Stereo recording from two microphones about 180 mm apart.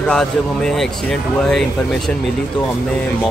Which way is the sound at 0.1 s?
5° left (ahead or behind).